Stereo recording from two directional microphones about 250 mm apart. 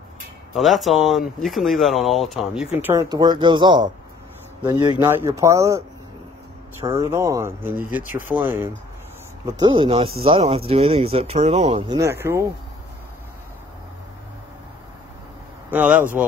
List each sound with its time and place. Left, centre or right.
0.6 s speech: centre
2.8 s speech: centre
4.9 s speech: centre; by 12.0 s right
12.0 s speech: centre
15.7 s speech: centre